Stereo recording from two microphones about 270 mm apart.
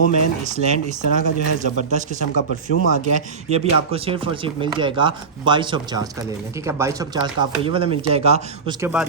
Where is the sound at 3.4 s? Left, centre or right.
Right.